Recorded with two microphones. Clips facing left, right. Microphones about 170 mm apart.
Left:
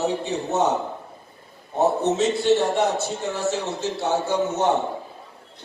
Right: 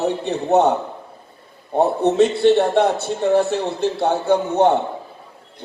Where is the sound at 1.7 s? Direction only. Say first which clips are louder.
Right 5 dB; 60° right (ahead or behind).